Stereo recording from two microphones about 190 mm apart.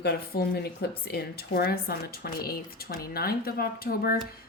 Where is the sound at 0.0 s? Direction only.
55° left (ahead or behind).